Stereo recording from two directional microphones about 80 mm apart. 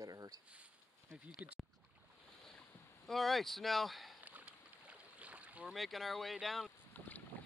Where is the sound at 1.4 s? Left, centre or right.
Centre.